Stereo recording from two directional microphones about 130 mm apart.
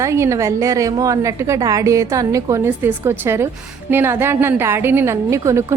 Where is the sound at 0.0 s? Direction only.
20° right (ahead or behind).